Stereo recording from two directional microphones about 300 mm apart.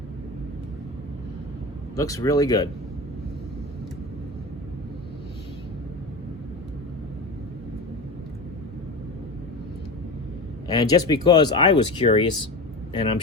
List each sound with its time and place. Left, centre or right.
2.0 s speech: centre
10.7 s speech: centre